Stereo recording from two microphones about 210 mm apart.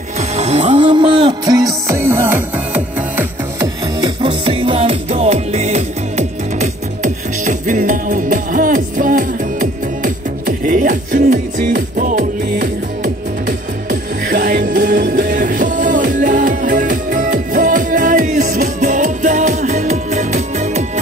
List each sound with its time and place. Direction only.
0.4 s music: 30° right (ahead or behind)